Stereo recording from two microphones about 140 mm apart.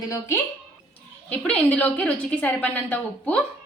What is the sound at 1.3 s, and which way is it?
A woman's voice, 10° left (ahead or behind).